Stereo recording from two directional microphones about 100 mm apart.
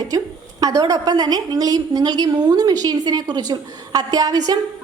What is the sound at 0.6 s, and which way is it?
A woman's voice, 35° right (ahead or behind).